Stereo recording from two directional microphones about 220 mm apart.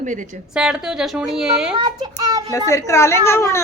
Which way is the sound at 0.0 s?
35° right (ahead or behind).